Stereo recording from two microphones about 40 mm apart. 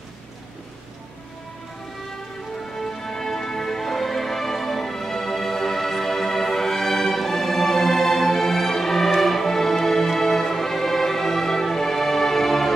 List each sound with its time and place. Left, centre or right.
2.8 s music: centre